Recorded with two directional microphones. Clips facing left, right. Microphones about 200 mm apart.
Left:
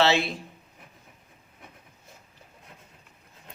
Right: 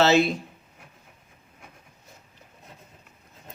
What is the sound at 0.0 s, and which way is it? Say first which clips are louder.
Speech: right 4 dB; 45° right (ahead or behind).